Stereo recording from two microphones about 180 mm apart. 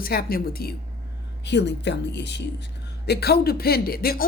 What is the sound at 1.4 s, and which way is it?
Speech, 75° left (ahead or behind).